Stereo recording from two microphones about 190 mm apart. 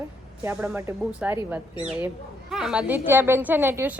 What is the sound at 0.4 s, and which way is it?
A woman's voice, 10° right (ahead or behind).